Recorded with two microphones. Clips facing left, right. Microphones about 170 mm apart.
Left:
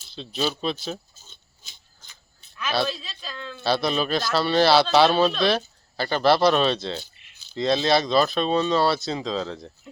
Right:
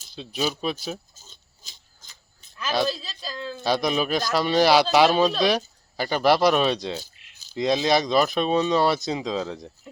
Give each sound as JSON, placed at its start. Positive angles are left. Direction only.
{"t": 0.1, "sound": "speech", "side_deg": -10}
{"t": 1.3, "sound": "pig", "side_deg": -40}
{"t": 2.8, "sound": "speech", "side_deg": -35}
{"t": 3.6, "sound": "speech", "side_deg": -15}
{"t": 7.0, "sound": "a sound", "side_deg": -40}
{"t": 7.5, "sound": "speech", "side_deg": -15}